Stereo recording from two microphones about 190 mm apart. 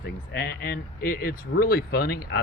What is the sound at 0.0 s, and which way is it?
Speech, 55° left (ahead or behind).